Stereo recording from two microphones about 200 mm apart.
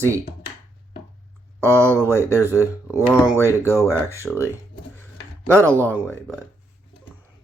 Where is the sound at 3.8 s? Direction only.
15° right (ahead or behind).